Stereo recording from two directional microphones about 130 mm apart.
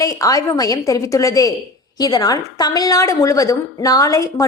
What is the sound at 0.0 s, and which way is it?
A woman's voice, 25° left (ahead or behind).